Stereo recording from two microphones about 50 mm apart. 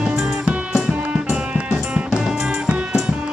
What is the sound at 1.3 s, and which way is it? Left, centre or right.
Music, centre.